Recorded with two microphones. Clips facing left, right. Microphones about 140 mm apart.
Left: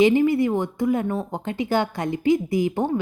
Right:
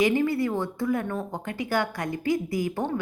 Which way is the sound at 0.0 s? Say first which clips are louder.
Left 6 dB; 20° left (ahead or behind).